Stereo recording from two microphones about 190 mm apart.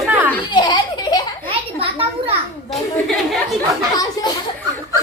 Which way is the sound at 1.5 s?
30° right (ahead or behind).